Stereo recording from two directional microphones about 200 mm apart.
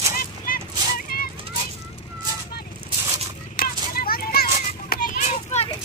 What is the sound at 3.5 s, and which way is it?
Children playing, 50° left (ahead or behind).